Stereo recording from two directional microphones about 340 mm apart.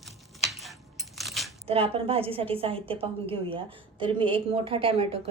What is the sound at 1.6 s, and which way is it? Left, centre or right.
A woman's voice, centre.